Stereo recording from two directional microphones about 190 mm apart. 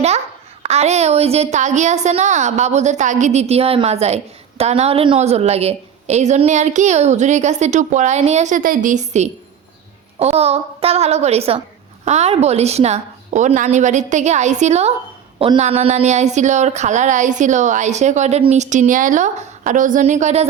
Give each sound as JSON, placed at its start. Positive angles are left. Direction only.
{"t": 0.6, "sound": "a woman's voice", "side_deg": -35}